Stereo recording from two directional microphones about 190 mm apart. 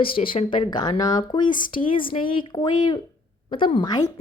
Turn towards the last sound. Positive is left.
turn(degrees=20)  # may be behind; listen again after turning